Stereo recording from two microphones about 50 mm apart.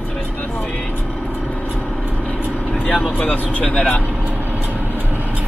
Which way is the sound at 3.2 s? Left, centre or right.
Left.